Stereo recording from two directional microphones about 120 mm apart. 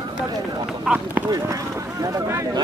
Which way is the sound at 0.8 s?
10° right (ahead or behind).